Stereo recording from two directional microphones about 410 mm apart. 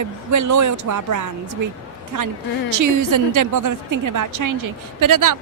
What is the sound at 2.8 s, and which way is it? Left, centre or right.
Speech, right.